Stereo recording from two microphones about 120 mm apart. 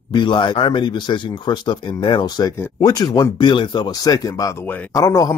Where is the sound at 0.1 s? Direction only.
40° left (ahead or behind).